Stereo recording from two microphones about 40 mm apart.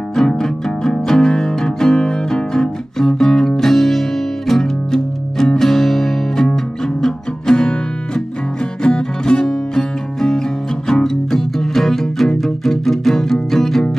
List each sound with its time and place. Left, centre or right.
0.1 s music: centre